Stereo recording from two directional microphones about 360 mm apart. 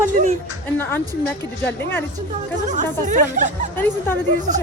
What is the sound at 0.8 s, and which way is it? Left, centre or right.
Speech, centre.